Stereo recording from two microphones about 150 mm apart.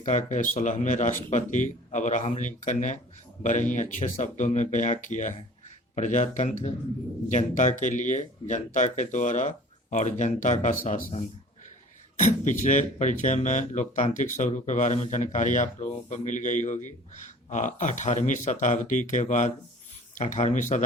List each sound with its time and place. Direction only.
0.0 s speech: 55° left (ahead or behind)
12.2 s speech: 55° left (ahead or behind)